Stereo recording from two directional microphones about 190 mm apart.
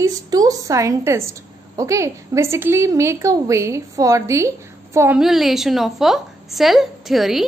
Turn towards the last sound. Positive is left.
turn(degrees=0)  # may be behind; listen again after turning